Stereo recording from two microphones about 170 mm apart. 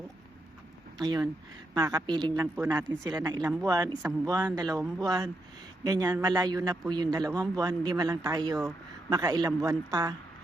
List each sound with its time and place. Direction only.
0.9 s a man's voice: 25° right (ahead or behind)